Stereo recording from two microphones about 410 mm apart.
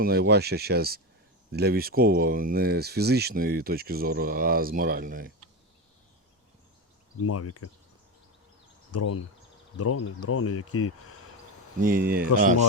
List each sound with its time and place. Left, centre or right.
0.0 s speech: right
7.2 s speech: left
8.9 s speech: left
11.8 s speech: right